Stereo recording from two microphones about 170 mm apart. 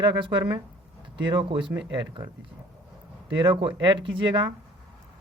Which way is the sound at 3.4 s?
30° right (ahead or behind).